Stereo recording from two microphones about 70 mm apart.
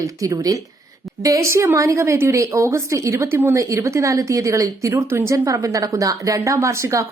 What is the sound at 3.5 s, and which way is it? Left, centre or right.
A woman's voice, right.